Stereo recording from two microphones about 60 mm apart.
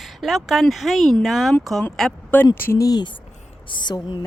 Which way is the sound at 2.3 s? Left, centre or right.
Left.